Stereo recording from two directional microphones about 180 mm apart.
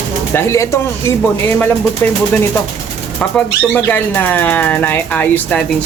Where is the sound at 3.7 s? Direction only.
10° left (ahead or behind).